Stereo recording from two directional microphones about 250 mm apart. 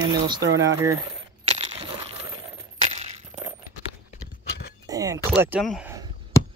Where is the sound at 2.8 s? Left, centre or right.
Right.